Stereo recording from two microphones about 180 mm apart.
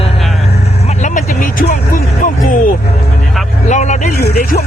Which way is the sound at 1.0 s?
50° left (ahead or behind).